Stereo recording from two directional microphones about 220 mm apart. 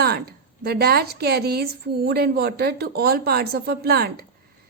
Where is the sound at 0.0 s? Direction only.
45° right (ahead or behind).